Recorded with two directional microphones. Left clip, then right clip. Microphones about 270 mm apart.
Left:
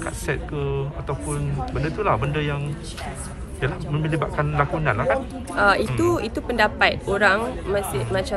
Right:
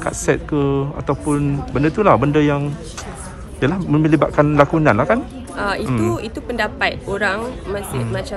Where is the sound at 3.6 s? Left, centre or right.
Right.